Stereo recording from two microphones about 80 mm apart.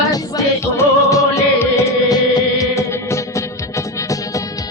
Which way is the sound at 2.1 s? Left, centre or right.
Left.